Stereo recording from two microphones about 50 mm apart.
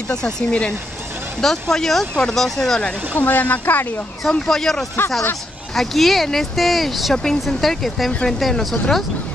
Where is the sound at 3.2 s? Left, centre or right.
Left.